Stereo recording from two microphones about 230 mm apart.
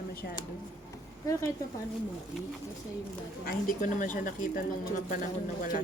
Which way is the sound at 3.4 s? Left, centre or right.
Left.